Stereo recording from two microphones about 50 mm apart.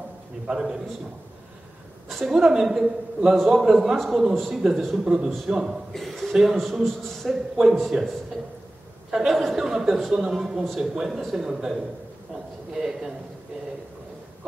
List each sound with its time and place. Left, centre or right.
0.5 s a man's voice: centre
2.0 s a woman's voice: centre
2.3 s a man's voice: centre
5.9 s a man's voice: centre
7.9 s a man's voice: centre
9.1 s a woman's voice: centre